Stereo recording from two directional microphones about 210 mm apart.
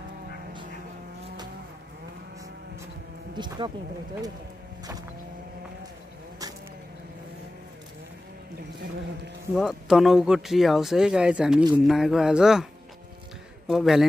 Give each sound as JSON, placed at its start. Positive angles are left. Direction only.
{"t": 3.3, "sound": "speech", "side_deg": -20}
{"t": 9.6, "sound": "speech", "side_deg": 0}
{"t": 13.7, "sound": "speech", "side_deg": 0}